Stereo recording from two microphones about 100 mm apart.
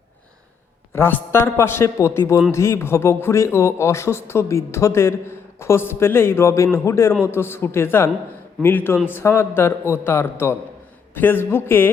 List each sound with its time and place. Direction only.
0.9 s speech: 20° left (ahead or behind)